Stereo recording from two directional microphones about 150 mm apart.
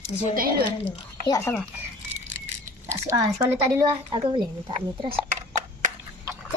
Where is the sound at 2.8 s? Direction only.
20° right (ahead or behind).